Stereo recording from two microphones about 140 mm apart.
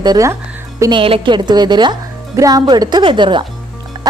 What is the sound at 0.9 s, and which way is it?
Speech, 40° right (ahead or behind).